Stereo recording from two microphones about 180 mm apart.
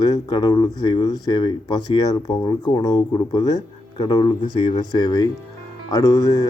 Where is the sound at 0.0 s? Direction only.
25° left (ahead or behind).